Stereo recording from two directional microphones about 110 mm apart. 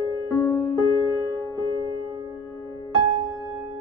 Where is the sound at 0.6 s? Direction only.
30° left (ahead or behind).